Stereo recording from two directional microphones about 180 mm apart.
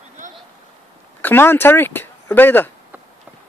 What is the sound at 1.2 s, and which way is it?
Speech, 10° left (ahead or behind).